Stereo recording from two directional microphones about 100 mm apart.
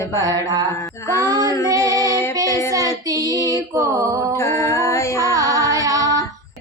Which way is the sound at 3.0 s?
35° right (ahead or behind).